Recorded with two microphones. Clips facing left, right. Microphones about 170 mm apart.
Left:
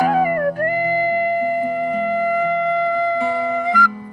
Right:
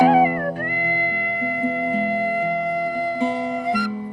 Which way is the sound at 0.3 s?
50° left (ahead or behind).